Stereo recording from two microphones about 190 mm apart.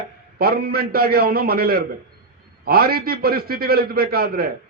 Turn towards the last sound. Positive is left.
turn(degrees=-55)  # may be behind; listen again after turning